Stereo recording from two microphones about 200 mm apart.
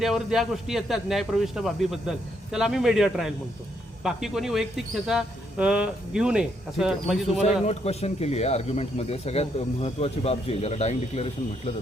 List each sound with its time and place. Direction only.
0.0 s speech: centre (ahead or behind)
7.6 s speech: 30° left (ahead or behind)